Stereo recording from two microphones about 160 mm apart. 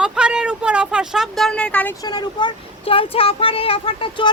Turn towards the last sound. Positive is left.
turn(degrees=35)  # may be behind; listen again after turning